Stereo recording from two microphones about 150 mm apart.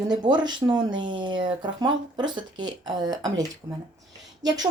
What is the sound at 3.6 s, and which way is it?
Speech, 35° right (ahead or behind).